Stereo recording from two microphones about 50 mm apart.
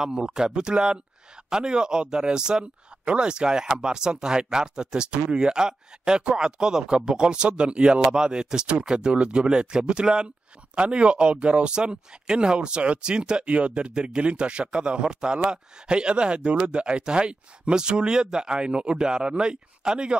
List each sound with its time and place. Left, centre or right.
0.0 s speech: centre